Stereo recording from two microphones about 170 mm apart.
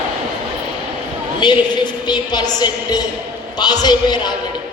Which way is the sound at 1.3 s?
25° left (ahead or behind).